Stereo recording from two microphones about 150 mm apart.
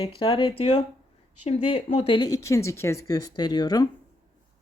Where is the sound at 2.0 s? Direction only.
35° left (ahead or behind).